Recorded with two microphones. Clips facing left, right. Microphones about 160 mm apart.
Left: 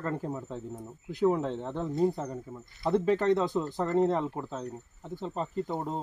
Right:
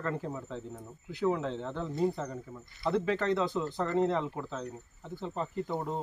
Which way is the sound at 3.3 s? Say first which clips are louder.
Left 4 dB; 40° left (ahead or behind).